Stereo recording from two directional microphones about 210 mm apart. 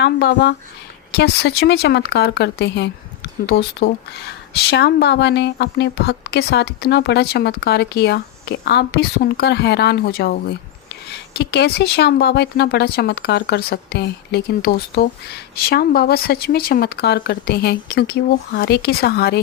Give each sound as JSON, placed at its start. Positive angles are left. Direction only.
{"t": 0.0, "sound": "speech", "side_deg": 55}